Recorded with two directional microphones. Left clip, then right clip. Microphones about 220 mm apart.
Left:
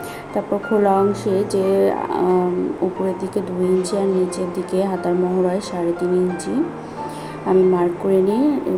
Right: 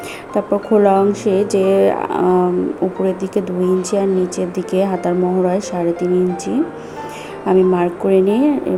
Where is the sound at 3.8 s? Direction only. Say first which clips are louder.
Right 2 dB; 25° right (ahead or behind).